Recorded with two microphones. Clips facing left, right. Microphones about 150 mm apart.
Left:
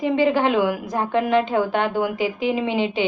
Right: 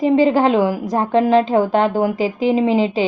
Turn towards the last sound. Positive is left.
turn(degrees=-35)  # may be behind; listen again after turning